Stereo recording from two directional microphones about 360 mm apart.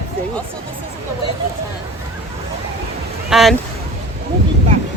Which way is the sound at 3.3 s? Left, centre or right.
Centre.